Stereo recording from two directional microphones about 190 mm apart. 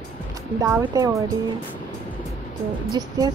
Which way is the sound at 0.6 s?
15° right (ahead or behind).